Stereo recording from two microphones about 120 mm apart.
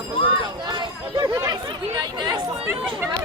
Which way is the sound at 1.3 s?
25° right (ahead or behind).